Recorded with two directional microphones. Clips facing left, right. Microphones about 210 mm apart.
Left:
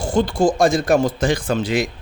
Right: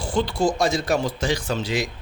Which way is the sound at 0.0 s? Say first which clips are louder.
Left 5 dB; 45° left (ahead or behind).